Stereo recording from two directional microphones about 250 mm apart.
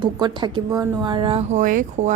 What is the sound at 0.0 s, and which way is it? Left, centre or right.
A woman's voice, centre.